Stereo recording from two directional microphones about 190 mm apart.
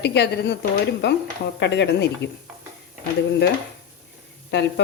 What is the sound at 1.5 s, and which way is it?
Speech, 65° left (ahead or behind).